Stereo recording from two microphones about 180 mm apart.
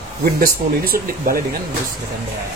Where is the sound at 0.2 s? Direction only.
55° right (ahead or behind).